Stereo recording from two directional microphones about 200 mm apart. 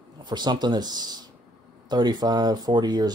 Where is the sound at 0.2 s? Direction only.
20° right (ahead or behind).